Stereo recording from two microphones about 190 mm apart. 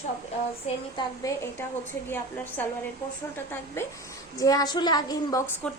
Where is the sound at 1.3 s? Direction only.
20° left (ahead or behind).